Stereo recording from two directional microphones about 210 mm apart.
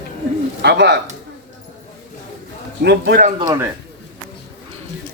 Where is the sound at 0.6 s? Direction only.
55° right (ahead or behind).